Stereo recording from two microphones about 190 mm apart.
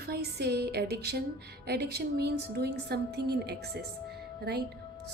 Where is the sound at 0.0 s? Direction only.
55° right (ahead or behind).